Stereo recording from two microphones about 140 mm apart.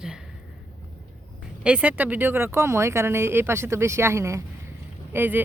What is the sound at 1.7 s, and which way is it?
Speech, 10° right (ahead or behind).